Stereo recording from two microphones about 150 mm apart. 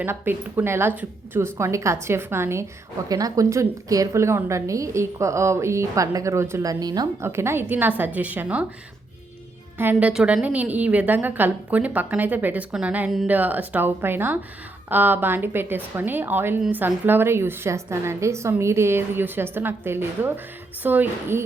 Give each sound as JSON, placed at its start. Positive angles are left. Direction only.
{"t": 0.0, "sound": "a woman's voice", "side_deg": -15}
{"t": 9.7, "sound": "a woman's voice", "side_deg": -10}